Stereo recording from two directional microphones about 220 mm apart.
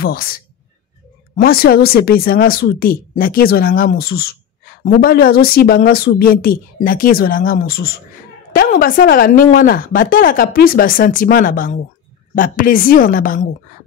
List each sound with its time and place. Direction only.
0.0 s speech: 40° left (ahead or behind)
1.3 s speech: 45° left (ahead or behind)